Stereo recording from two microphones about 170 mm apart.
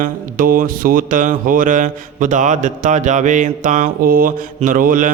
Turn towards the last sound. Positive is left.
turn(degrees=-55)  # may be behind; listen again after turning